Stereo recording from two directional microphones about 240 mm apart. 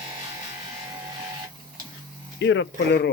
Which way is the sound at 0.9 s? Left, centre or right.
Centre.